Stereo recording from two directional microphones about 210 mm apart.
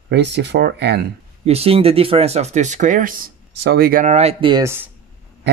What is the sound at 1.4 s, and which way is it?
Speech, 30° right (ahead or behind).